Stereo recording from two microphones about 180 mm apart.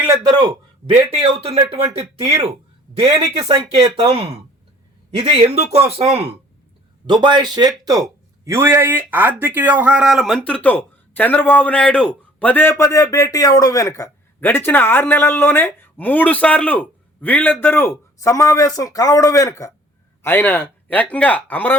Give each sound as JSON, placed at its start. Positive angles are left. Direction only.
{"t": 0.0, "sound": "speech", "side_deg": -20}
{"t": 2.0, "sound": "a man's voice", "side_deg": -20}
{"t": 2.9, "sound": "a man's voice", "side_deg": -35}